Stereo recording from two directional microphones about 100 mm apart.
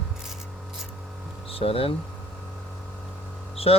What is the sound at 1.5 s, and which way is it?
Speech, 70° left (ahead or behind).